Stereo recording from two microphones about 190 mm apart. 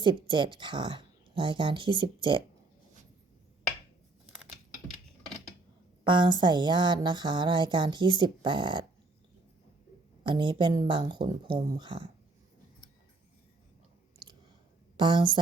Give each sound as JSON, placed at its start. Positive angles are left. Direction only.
{"t": 0.0, "sound": "speech", "side_deg": -25}
{"t": 6.1, "sound": "speech", "side_deg": -25}
{"t": 10.2, "sound": "speech", "side_deg": -25}
{"t": 14.9, "sound": "speech", "side_deg": -25}